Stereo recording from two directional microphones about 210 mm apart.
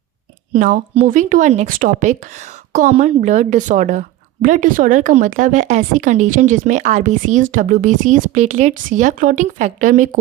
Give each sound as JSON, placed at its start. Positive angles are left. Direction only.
{"t": 0.5, "sound": "a woman's voice", "side_deg": -40}